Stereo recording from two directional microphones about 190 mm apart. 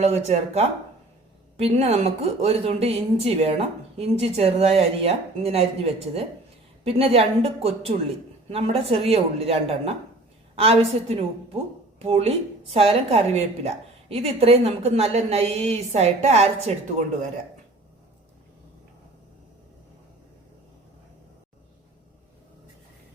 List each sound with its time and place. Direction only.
0.0 s speech: 35° right (ahead or behind)